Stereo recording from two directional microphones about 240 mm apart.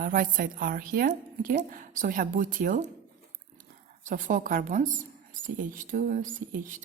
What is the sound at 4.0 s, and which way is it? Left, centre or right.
Speech, right.